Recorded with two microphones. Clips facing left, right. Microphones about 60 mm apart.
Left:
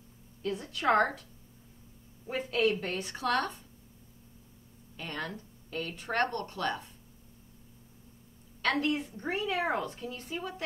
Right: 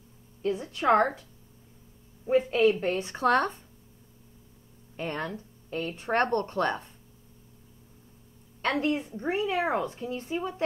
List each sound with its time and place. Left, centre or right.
0.4 s speech: right
2.2 s speech: right
4.9 s speech: right
8.8 s speech: right